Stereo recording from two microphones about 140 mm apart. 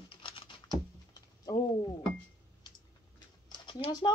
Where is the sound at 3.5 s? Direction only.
40° left (ahead or behind).